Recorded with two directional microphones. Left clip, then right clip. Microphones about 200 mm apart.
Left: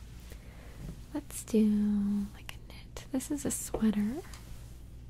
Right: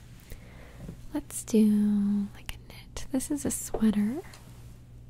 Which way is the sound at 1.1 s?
15° right (ahead or behind).